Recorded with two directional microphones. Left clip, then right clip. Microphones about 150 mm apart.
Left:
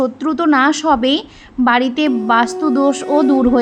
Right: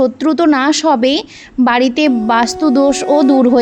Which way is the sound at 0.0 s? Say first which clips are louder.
Right 4 dB; 35° right (ahead or behind).